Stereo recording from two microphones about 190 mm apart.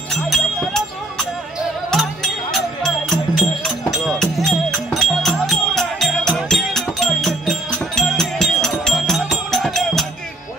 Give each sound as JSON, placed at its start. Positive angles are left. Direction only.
{"t": 0.1, "sound": "music", "side_deg": 0}
{"t": 2.5, "sound": "music", "side_deg": 0}